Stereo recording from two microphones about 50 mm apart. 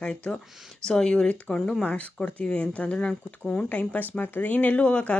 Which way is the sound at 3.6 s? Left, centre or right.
Left.